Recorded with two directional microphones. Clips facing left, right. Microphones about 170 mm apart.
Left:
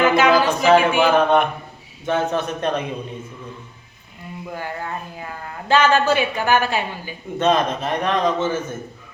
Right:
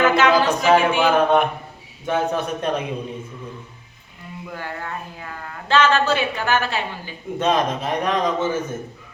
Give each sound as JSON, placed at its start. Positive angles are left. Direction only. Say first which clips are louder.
{"t": 0.0, "sound": "a sound", "louder": "left 1 dB", "side_deg": 10}
{"t": 0.8, "sound": "speech", "louder": "left 2 dB", "side_deg": 10}
{"t": 1.0, "sound": "a man's voice", "louder": "left 1 dB", "side_deg": -10}
{"t": 4.5, "sound": "speech", "louder": "left 2 dB", "side_deg": 15}
{"t": 7.3, "sound": "a man's voice", "louder": "left 2 dB", "side_deg": -10}